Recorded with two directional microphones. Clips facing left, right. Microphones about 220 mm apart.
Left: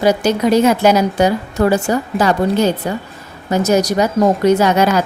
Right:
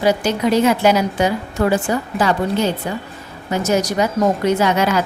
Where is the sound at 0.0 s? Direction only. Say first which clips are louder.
Left 3 dB; 40° left (ahead or behind).